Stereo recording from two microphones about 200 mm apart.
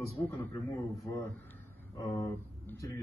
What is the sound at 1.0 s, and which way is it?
Speech, 15° left (ahead or behind).